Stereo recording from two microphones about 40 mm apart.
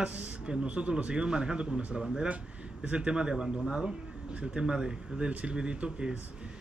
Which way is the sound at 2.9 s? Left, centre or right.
Right.